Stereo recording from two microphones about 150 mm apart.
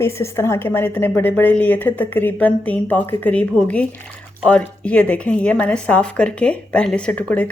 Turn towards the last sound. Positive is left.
turn(degrees=10)  # may be behind; listen again after turning